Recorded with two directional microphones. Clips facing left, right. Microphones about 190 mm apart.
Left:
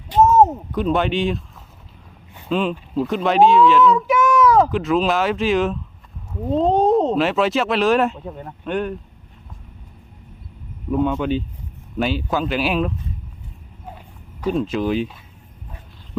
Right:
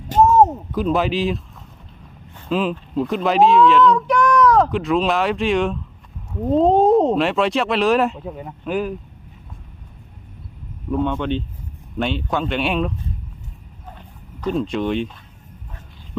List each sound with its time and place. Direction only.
0.2 s a sound: centre (ahead or behind)
2.5 s speech: centre (ahead or behind)
10.9 s speech: 5° left (ahead or behind)
14.4 s speech: 5° left (ahead or behind)